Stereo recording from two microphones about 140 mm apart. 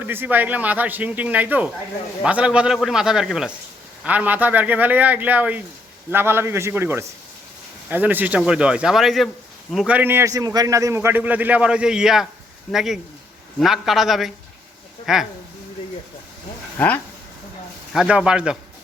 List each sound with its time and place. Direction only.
0.0 s a man's voice: 15° right (ahead or behind)
16.7 s speech: 10° left (ahead or behind)
17.9 s a man's voice: 5° right (ahead or behind)